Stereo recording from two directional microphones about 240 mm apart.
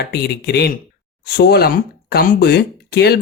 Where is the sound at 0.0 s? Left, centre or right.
Left.